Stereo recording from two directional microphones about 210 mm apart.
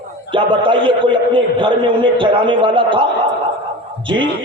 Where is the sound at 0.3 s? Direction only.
25° right (ahead or behind).